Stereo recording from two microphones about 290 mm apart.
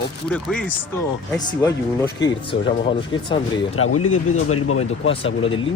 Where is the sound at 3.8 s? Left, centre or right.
Left.